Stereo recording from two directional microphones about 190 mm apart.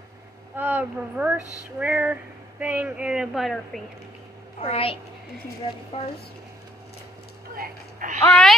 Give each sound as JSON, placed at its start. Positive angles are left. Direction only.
{"t": 0.6, "sound": "speech", "side_deg": -10}
{"t": 1.4, "sound": "speech", "side_deg": 20}
{"t": 1.8, "sound": "a woman's voice", "side_deg": -5}
{"t": 4.6, "sound": "a child's voice", "side_deg": 30}
{"t": 5.9, "sound": "a child's voice", "side_deg": 30}
{"t": 7.5, "sound": "speech", "side_deg": -45}
{"t": 8.3, "sound": "a sound", "side_deg": 0}